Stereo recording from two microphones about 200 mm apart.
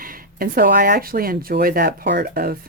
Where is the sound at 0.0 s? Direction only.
45° right (ahead or behind).